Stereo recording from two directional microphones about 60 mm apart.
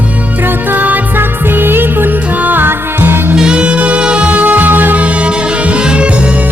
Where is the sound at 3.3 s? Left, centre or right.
Centre.